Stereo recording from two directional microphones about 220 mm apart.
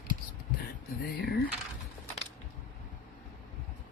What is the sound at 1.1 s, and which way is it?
Speech, 45° left (ahead or behind).